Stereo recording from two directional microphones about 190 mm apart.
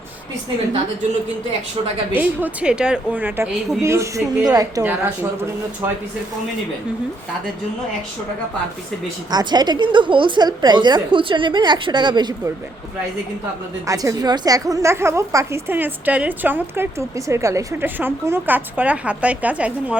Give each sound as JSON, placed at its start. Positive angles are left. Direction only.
{"t": 2.1, "sound": "a woman's voice", "side_deg": -10}
{"t": 9.3, "sound": "a woman's voice", "side_deg": -20}
{"t": 13.8, "sound": "a woman's voice", "side_deg": -15}